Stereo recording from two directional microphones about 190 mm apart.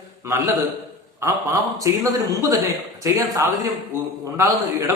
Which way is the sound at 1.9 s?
15° right (ahead or behind).